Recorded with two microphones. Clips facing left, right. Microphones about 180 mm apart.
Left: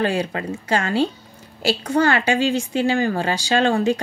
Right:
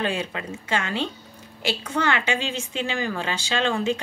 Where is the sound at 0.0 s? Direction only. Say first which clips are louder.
Left 5 dB; 35° left (ahead or behind).